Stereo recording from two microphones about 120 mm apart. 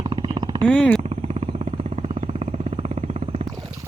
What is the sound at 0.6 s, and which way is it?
Speech, 10° left (ahead or behind).